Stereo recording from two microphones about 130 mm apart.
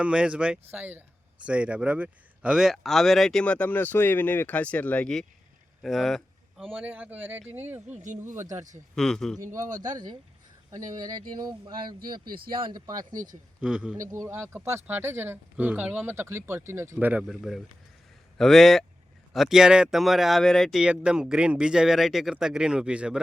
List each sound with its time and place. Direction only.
0.0 s speech: 10° right (ahead or behind)
6.7 s speech: 10° right (ahead or behind)
7.9 s speech: 70° right (ahead or behind)
8.4 s speech: 20° right (ahead or behind)
9.0 s speech: 5° left (ahead or behind)
9.8 s speech: 35° right (ahead or behind)
13.6 s speech: 5° right (ahead or behind)
14.1 s speech: 20° right (ahead or behind)
17.2 s speech: centre (ahead or behind)